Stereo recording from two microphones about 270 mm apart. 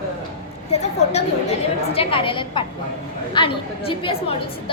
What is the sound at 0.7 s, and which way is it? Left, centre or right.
A woman's voice, left.